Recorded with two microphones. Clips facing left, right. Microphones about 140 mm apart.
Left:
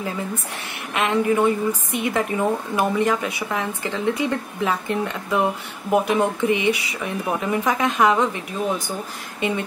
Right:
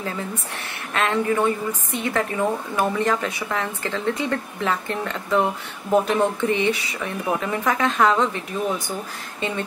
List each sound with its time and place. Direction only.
0.9 s a woman's voice: 15° left (ahead or behind)
9.4 s a woman's voice: 15° left (ahead or behind)